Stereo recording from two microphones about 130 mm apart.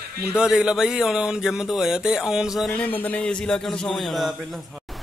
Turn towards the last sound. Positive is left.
turn(degrees=0)  # may be behind; listen again after turning